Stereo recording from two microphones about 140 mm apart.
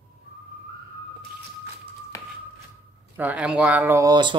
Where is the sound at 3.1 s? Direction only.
10° right (ahead or behind).